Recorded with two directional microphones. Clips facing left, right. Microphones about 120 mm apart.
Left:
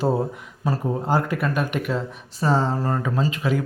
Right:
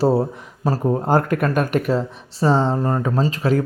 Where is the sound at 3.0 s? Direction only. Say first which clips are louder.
Right 4 dB; 35° right (ahead or behind).